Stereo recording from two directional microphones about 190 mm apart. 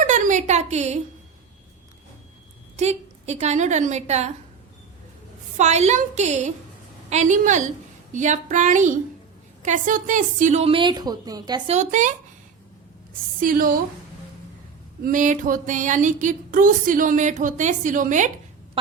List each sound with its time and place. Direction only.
0.0 s a sound: 40° right (ahead or behind)
2.7 s speech: 35° right (ahead or behind)
5.5 s a woman's voice: 35° right (ahead or behind)
11.7 s speech: 40° right (ahead or behind)
13.4 s speech: 50° right (ahead or behind)
15.0 s speech: 40° right (ahead or behind)